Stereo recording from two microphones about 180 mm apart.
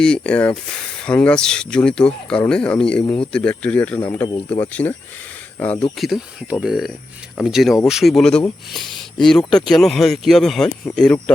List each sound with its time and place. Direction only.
0.0 s speech: 5° left (ahead or behind)
3.0 s speech: 25° left (ahead or behind)
3.3 s speech: 5° left (ahead or behind)